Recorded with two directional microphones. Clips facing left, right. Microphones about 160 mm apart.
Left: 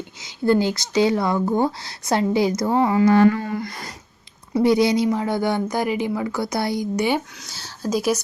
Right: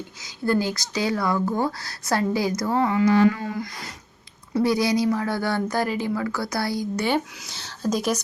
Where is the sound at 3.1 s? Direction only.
55° left (ahead or behind).